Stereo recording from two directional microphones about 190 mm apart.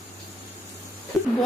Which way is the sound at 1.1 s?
Centre (ahead or behind).